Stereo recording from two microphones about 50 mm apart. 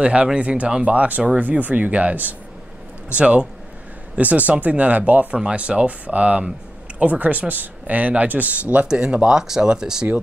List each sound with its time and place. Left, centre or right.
0.0 s speech: right
8.8 s speech: centre